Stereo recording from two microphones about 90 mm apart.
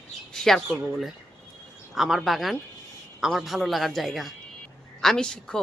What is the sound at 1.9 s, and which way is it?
Speech, 5° right (ahead or behind).